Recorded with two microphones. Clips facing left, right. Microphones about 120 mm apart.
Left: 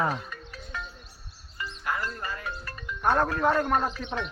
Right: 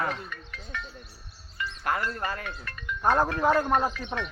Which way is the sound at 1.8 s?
60° right (ahead or behind).